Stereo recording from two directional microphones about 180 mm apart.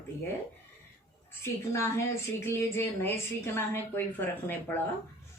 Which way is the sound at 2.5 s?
15° left (ahead or behind).